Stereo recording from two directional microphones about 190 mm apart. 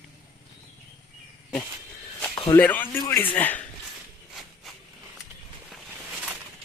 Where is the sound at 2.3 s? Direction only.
25° left (ahead or behind).